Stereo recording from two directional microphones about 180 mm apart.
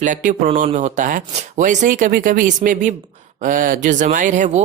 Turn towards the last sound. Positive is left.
turn(degrees=-40)  # may be behind; listen again after turning